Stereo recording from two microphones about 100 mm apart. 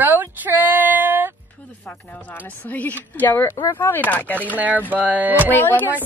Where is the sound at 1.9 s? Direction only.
15° left (ahead or behind).